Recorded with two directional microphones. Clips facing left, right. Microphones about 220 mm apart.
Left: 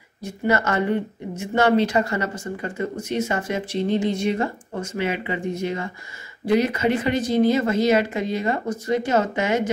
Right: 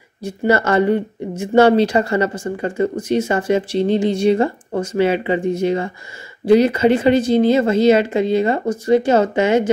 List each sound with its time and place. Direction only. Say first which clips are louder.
0.2 s speech: right 5 dB; 30° right (ahead or behind)